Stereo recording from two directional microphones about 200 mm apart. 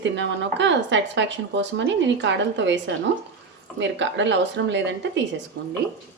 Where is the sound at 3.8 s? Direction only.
65° right (ahead or behind).